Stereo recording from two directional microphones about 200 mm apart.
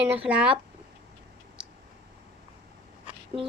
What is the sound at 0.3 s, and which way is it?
Speech, 5° right (ahead or behind).